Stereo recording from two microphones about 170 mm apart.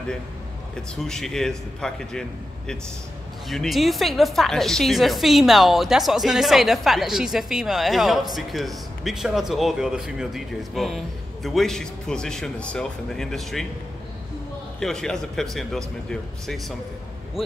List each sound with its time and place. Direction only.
0.9 s a woman's voice: centre (ahead or behind)
3.4 s a woman's voice: centre (ahead or behind)
14.8 s a woman's voice: 5° left (ahead or behind)